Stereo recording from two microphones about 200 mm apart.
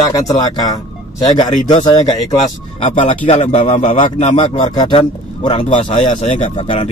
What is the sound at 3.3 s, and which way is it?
A man's voice, 35° left (ahead or behind).